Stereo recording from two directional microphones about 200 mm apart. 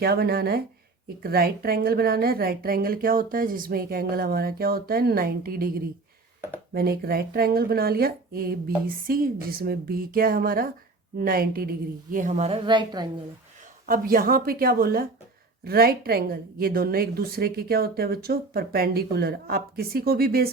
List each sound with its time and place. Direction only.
0.0 s a woman's voice: 50° right (ahead or behind)
6.7 s a woman's voice: 50° right (ahead or behind)
12.1 s a woman's voice: 40° right (ahead or behind); by 13.1 s 20° right (ahead or behind)
13.8 s a woman's voice: 45° right (ahead or behind)